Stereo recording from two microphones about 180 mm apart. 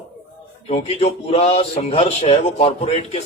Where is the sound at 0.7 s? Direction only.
35° left (ahead or behind).